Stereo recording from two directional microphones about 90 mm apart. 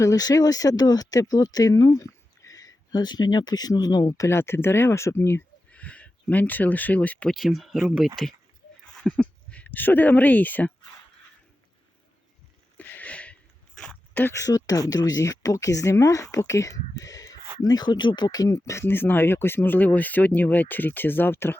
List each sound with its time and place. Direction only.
0.0 s speech: 40° left (ahead or behind)
4.3 s speech: 25° left (ahead or behind)
5.7 s speech: 15° left (ahead or behind)
7.3 s speech: centre (ahead or behind)
9.0 s speech: 15° left (ahead or behind)
12.7 s a sound: 20° left (ahead or behind)
14.1 s speech: 20° left (ahead or behind)
14.3 s speech: 40° left (ahead or behind); by 21.6 s 25° left (ahead or behind)